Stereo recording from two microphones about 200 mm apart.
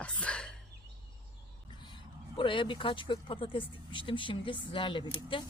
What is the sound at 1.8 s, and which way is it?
Speech, 25° left (ahead or behind).